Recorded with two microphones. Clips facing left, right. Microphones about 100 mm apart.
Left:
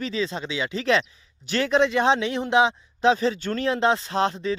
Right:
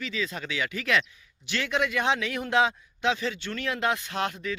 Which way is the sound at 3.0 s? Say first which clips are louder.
Left 7 dB; 35° left (ahead or behind).